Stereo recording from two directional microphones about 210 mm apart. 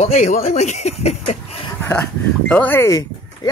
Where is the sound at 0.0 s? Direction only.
35° left (ahead or behind).